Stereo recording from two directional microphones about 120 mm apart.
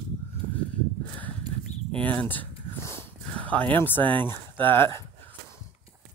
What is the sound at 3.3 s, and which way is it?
Speech, 15° left (ahead or behind).